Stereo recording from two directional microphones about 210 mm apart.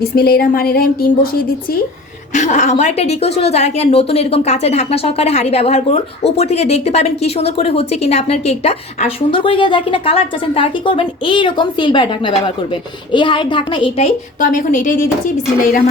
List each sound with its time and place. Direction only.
0.0 s speech: 45° left (ahead or behind)
2.3 s a woman's voice: 35° left (ahead or behind)
14.4 s a woman's voice: 40° left (ahead or behind)